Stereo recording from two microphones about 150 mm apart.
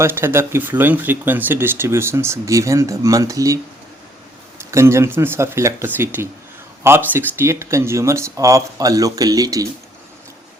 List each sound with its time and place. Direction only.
0.0 s speech: 15° right (ahead or behind)